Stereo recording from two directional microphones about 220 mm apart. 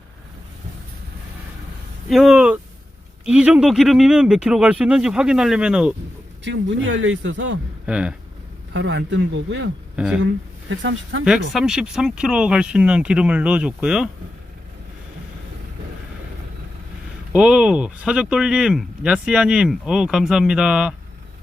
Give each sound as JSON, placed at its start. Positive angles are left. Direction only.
{"t": 2.0, "sound": "speech", "side_deg": 0}
{"t": 6.4, "sound": "a man's voice", "side_deg": -55}
{"t": 7.9, "sound": "speech", "side_deg": -5}
{"t": 8.7, "sound": "speech", "side_deg": -55}
{"t": 9.9, "sound": "speech", "side_deg": -5}
{"t": 10.7, "sound": "a man's voice", "side_deg": -55}
{"t": 11.3, "sound": "speech", "side_deg": -5}
{"t": 17.3, "sound": "speech", "side_deg": -5}